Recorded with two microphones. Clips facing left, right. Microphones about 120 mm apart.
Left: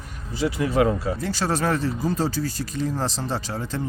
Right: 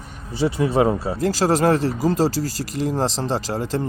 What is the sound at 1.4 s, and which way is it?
Speech, 40° right (ahead or behind).